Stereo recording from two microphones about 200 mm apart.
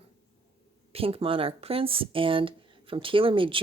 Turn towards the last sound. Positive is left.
turn(degrees=-25)  # may be behind; listen again after turning